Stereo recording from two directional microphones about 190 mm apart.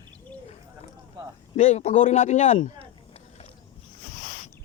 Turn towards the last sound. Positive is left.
turn(degrees=30)  # may be behind; listen again after turning